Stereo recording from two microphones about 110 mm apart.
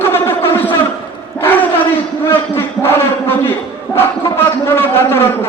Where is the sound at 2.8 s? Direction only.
20° left (ahead or behind).